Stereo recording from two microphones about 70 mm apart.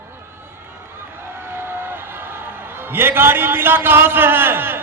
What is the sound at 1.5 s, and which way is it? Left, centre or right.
A man's voice, right.